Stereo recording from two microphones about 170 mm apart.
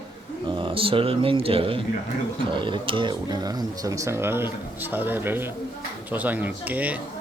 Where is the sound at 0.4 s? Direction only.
30° right (ahead or behind).